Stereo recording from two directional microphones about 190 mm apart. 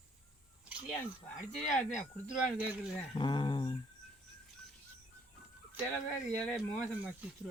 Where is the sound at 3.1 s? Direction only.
25° left (ahead or behind).